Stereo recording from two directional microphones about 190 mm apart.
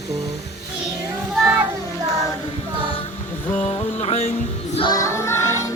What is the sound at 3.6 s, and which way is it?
Speech, 25° left (ahead or behind).